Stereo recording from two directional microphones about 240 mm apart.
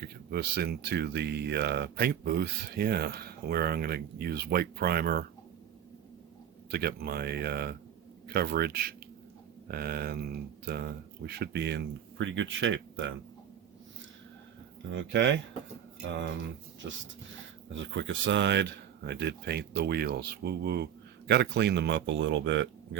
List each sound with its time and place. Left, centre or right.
0.0 s speech: right
6.7 s speech: right
14.9 s speech: right
16.8 s speech: right